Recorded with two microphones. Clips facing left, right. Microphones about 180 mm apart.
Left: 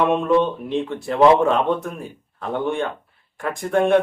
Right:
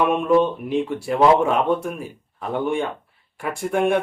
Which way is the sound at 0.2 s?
10° right (ahead or behind).